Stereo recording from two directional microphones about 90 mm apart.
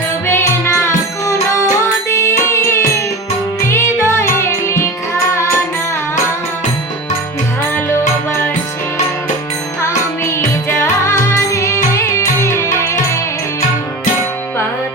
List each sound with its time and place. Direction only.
0.3 s music: 30° left (ahead or behind)
9.8 s music: 30° left (ahead or behind)